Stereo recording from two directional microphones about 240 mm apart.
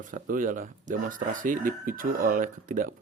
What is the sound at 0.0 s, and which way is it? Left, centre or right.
Speech, right.